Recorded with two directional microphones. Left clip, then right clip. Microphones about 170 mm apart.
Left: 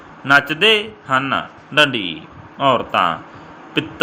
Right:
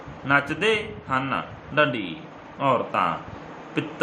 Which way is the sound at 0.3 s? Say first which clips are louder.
Left 8 dB; 40° left (ahead or behind).